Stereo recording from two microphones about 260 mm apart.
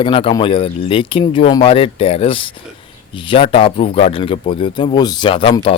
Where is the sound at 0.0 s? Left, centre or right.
Left.